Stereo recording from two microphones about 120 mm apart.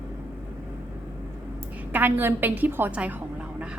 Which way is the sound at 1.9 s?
15° right (ahead or behind).